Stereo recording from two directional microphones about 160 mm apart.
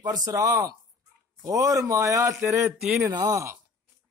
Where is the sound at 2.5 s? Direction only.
Centre (ahead or behind).